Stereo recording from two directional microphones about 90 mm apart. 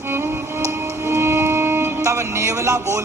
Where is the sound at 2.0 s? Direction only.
35° right (ahead or behind).